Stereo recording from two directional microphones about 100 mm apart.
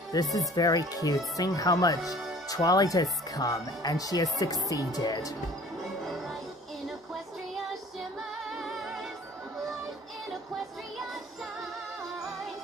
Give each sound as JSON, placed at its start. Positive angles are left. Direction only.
{"t": 0.1, "sound": "speech", "side_deg": 35}
{"t": 6.0, "sound": "music", "side_deg": 0}
{"t": 8.5, "sound": "music", "side_deg": -5}